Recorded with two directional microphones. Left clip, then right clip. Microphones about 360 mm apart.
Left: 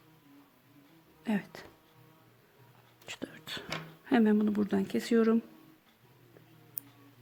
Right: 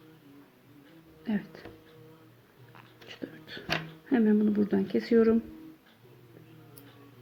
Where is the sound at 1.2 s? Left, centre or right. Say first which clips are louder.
Even; left.